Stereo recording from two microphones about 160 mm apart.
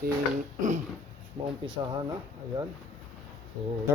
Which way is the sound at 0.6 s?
50° right (ahead or behind).